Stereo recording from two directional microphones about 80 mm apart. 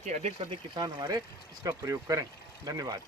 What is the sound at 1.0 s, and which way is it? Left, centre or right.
Speech, right.